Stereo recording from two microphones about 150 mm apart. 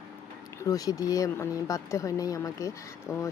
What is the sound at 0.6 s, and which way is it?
Speech, 25° left (ahead or behind).